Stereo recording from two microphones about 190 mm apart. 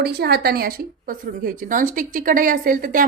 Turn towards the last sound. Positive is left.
turn(degrees=-45)  # may be behind; listen again after turning